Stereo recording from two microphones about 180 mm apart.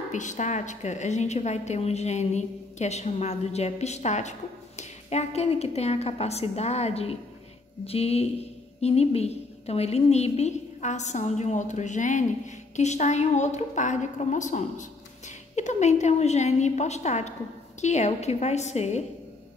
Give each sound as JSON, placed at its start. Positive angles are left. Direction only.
{"t": 0.1, "sound": "a woman's voice", "side_deg": 45}